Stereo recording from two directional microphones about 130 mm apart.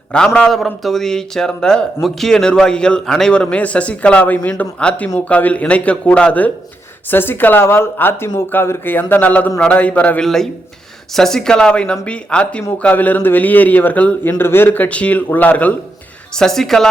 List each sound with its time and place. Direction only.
0.3 s a man's voice: centre (ahead or behind)